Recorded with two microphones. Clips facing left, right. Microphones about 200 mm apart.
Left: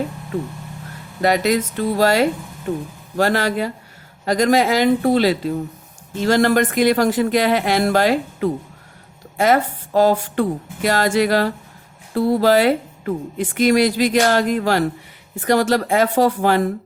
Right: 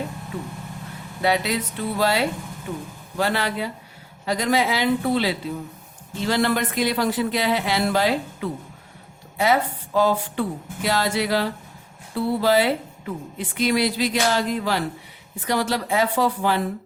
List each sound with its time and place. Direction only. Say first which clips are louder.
1.2 s speech: left 5 dB; 45° left (ahead or behind)